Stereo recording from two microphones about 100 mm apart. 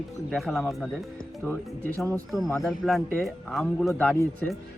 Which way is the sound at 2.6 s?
Centre (ahead or behind).